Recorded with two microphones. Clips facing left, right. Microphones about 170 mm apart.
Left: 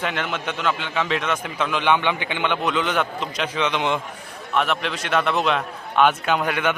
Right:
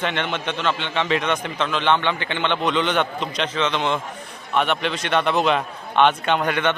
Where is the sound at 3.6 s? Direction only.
15° left (ahead or behind).